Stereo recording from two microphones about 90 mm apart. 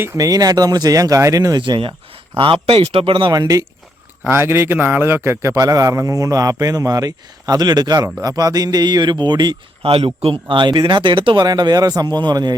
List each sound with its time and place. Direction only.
0.2 s a man's voice: 45° right (ahead or behind)
1.6 s speech: 60° right (ahead or behind)
2.4 s speech: 85° right; by 3.3 s 70° right (ahead or behind)
3.3 s a man's voice: 40° right (ahead or behind)
4.2 s a man's voice: 25° right (ahead or behind); by 9.6 s 50° right (ahead or behind)
9.8 s speech: 90° right; by 11.4 s 70° right (ahead or behind)
11.4 s a man's voice: 50° right (ahead or behind)